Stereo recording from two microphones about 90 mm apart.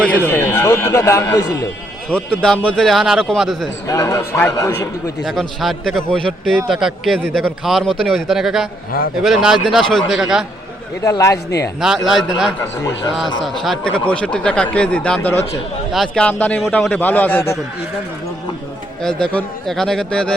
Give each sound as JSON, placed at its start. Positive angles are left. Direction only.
{"t": 0.0, "sound": "a man's voice", "side_deg": 20}
{"t": 2.0, "sound": "speech", "side_deg": 15}
{"t": 2.8, "sound": "a man's voice", "side_deg": 0}
{"t": 3.8, "sound": "a man's voice", "side_deg": 40}
{"t": 5.2, "sound": "a man's voice", "side_deg": 0}
{"t": 6.7, "sound": "a man's voice", "side_deg": -5}
{"t": 11.0, "sound": "a man's voice", "side_deg": 35}
{"t": 11.8, "sound": "a man's voice", "side_deg": -5}
{"t": 15.9, "sound": "a man's voice", "side_deg": 0}
{"t": 16.2, "sound": "a man's voice", "side_deg": 15}
{"t": 19.0, "sound": "a man's voice", "side_deg": 10}